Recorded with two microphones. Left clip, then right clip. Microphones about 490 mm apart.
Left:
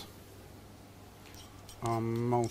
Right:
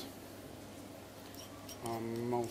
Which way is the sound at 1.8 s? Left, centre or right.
Left.